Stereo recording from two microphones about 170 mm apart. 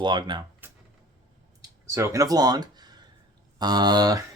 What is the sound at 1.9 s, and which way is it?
Speech, 15° right (ahead or behind).